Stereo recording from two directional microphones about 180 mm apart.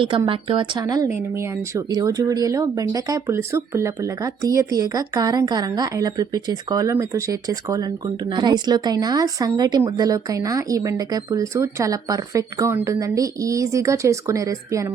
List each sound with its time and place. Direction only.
0.3 s speech: 30° right (ahead or behind)